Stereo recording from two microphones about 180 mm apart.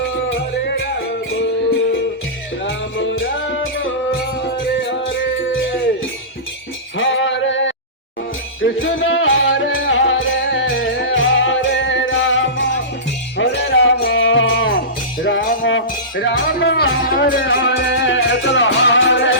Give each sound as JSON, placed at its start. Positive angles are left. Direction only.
{"t": 2.6, "sound": "music", "side_deg": 90}
{"t": 6.9, "sound": "male singing", "side_deg": 90}
{"t": 8.8, "sound": "music", "side_deg": 90}
{"t": 13.3, "sound": "music", "side_deg": 70}
{"t": 17.4, "sound": "music", "side_deg": 90}